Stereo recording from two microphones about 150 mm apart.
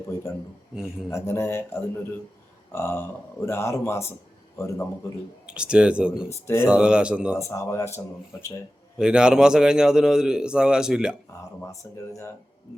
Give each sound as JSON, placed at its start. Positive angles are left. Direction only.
{"t": 1.1, "sound": "a man's voice", "side_deg": 15}
{"t": 5.5, "sound": "speech", "side_deg": -5}
{"t": 7.3, "sound": "speech", "side_deg": 20}
{"t": 9.0, "sound": "a man's voice", "side_deg": -5}
{"t": 11.6, "sound": "speech", "side_deg": 20}